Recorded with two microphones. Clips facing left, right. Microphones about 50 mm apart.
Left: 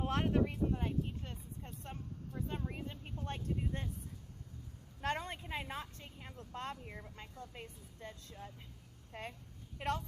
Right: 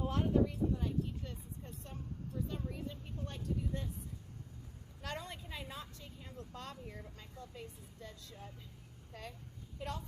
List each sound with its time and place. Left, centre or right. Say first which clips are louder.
0.0 s a sound: right 1 dB; left
4.9 s vehicle: left 6 dB; left
7.2 s speech: left 1 dB; left
9.7 s a woman's voice: left 6 dB; left